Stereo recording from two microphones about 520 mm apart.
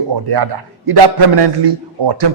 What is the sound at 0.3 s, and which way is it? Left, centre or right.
A man's voice, right.